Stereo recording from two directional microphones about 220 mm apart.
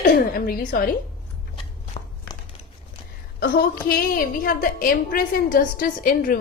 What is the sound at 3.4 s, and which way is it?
A woman's voice, 40° left (ahead or behind).